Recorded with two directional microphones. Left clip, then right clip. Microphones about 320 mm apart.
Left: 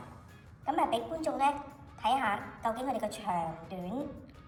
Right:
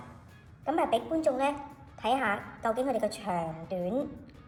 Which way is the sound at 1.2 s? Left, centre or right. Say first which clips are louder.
Right 2 dB; centre.